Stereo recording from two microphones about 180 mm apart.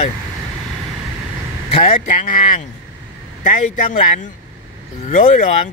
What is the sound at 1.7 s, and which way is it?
Speech, 30° left (ahead or behind).